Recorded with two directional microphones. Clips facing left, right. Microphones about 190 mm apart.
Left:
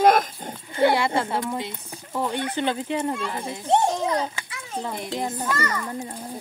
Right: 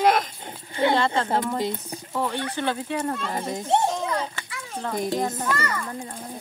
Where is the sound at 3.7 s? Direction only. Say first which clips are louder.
Left 2 dB; 20° left (ahead or behind).